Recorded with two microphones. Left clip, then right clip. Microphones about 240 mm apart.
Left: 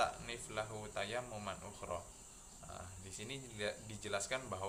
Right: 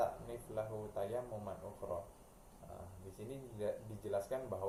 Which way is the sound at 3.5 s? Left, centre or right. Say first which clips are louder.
Right 2 dB; left.